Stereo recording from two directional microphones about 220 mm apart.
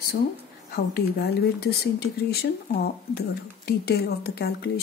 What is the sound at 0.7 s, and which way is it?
Speech, 45° left (ahead or behind).